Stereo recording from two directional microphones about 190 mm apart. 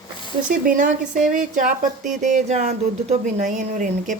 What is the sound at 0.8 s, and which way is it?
Speech, 40° right (ahead or behind).